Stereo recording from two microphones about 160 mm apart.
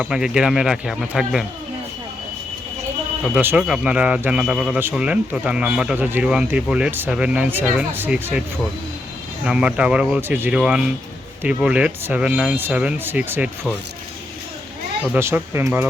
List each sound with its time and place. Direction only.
0.0 s speech: 5° right (ahead or behind)
3.3 s speech: 5° right (ahead or behind)
15.1 s speech: 15° right (ahead or behind)